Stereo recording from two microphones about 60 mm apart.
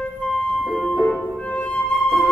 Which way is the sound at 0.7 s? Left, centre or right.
Centre.